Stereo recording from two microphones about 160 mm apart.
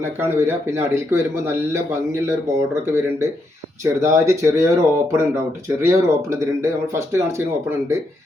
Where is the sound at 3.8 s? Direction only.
20° right (ahead or behind).